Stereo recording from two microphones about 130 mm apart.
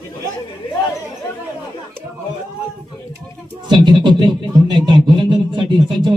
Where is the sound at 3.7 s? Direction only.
35° right (ahead or behind).